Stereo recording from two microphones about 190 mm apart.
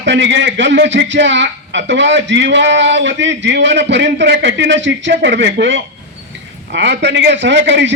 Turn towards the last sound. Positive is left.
turn(degrees=-70)  # may be behind; listen again after turning